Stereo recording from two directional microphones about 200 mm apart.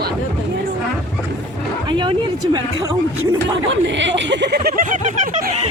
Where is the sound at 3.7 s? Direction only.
65° right (ahead or behind); by 5.5 s 35° right (ahead or behind).